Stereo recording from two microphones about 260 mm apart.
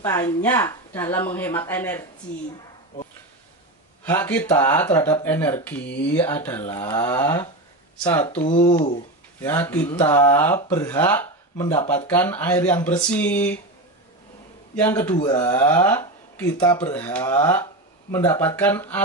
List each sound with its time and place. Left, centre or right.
0.0 s speech: centre
4.0 s speech: centre
8.4 s speech: left
9.4 s speech: centre
14.8 s speech: centre